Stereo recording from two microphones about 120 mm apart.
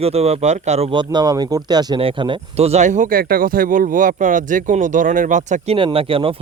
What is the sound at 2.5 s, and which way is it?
Speech, 60° right (ahead or behind).